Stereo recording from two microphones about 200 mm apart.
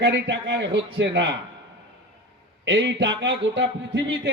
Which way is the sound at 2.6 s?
65° right (ahead or behind).